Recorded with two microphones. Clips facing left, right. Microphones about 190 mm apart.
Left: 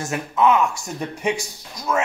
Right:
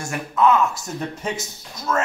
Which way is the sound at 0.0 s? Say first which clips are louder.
Even; 20° left (ahead or behind).